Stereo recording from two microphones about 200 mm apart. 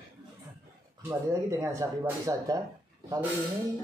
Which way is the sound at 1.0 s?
15° right (ahead or behind).